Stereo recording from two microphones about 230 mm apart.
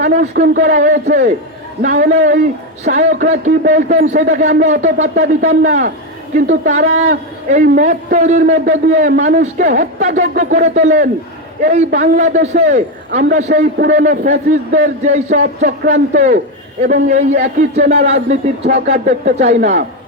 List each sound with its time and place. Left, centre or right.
0.0 s a man's voice: right